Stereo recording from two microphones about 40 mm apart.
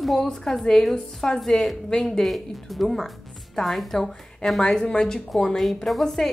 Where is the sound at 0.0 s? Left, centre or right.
Centre.